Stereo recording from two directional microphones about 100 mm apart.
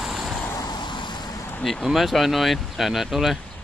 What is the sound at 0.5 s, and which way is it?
Vehicle, 40° left (ahead or behind).